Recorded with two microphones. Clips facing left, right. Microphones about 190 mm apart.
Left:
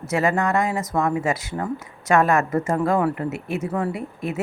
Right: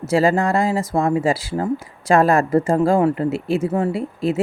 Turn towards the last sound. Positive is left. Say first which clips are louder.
# right 7 dB
turn(degrees=-30)  # may be behind; listen again after turning